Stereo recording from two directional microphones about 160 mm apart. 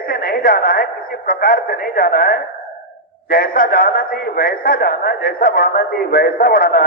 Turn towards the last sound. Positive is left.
turn(degrees=65)  # may be behind; listen again after turning